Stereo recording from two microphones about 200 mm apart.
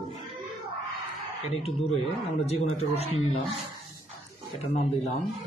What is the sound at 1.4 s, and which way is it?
Speech, 30° left (ahead or behind).